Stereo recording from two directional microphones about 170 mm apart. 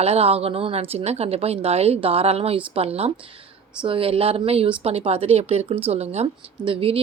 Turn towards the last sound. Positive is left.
turn(degrees=-30)  # may be behind; listen again after turning